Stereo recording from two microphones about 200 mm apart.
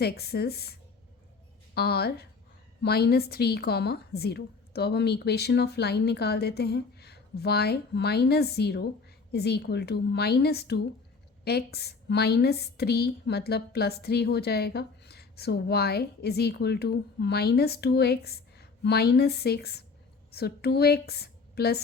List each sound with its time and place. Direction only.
0.0 s a woman's voice: 55° left (ahead or behind)